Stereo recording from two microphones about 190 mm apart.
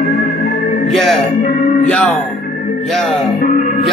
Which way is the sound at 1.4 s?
45° left (ahead or behind).